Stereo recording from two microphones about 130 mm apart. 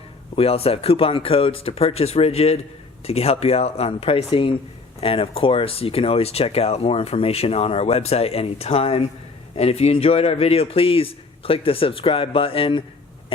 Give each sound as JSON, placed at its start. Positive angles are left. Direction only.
{"t": 0.3, "sound": "speech", "side_deg": 50}